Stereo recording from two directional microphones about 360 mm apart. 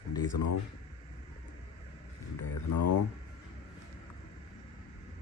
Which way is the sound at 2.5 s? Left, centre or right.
Left.